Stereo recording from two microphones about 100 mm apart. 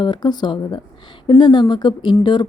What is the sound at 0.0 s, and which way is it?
Speech, 45° left (ahead or behind).